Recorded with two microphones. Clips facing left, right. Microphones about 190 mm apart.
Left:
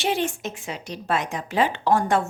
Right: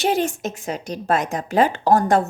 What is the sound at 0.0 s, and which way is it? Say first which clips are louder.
A woman's voice: right 4 dB; 40° right (ahead or behind).